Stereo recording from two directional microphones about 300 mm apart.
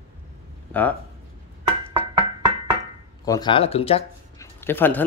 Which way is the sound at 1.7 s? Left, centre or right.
Centre.